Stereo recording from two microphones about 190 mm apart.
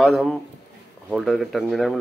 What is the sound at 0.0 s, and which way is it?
Speech, centre (ahead or behind).